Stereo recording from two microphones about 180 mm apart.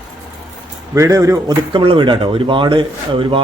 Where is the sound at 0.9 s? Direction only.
15° right (ahead or behind).